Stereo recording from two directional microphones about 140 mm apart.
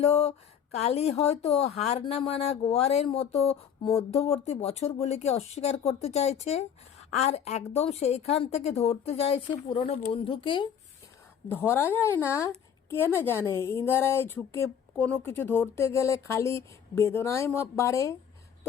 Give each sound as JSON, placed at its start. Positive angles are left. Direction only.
{"t": 0.0, "sound": "speech", "side_deg": 45}
{"t": 11.4, "sound": "a woman's voice", "side_deg": 15}